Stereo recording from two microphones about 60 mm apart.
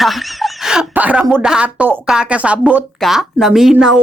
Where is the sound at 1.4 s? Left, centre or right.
Centre.